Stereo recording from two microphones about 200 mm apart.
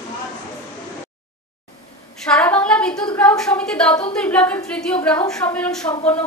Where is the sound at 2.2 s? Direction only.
5° left (ahead or behind).